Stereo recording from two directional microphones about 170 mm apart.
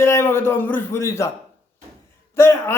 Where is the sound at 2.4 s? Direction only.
15° left (ahead or behind).